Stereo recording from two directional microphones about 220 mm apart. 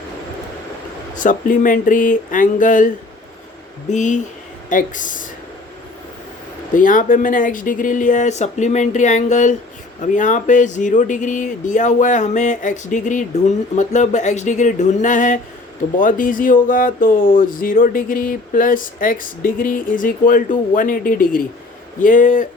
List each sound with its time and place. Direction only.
1.1 s speech: 35° left (ahead or behind)
3.9 s speech: 35° left (ahead or behind)
6.7 s speech: 35° left (ahead or behind)